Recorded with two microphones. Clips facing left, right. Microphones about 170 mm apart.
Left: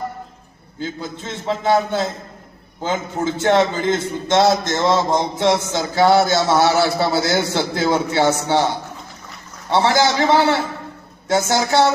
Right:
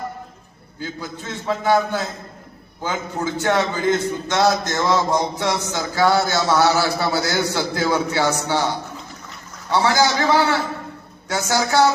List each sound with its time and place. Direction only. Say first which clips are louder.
0.8 s a man's voice: left 3 dB; 25° left (ahead or behind)
9.6 s a man's voice: left 2 dB; 25° left (ahead or behind)